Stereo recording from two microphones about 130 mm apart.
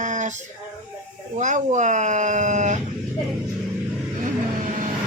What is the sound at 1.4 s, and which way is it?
Speech, 70° right (ahead or behind).